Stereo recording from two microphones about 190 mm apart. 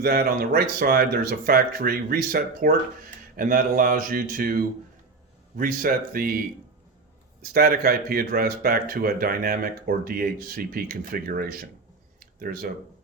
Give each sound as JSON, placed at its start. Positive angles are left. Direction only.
{"t": 0.0, "sound": "speech", "side_deg": -55}
{"t": 7.5, "sound": "speech", "side_deg": -50}
{"t": 12.2, "sound": "a sound", "side_deg": -50}